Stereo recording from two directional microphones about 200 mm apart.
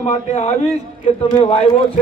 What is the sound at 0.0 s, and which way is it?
A man's voice, 35° left (ahead or behind).